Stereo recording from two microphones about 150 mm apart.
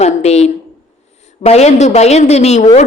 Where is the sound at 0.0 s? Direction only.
45° left (ahead or behind).